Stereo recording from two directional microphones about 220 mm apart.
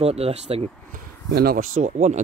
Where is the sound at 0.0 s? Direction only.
30° right (ahead or behind).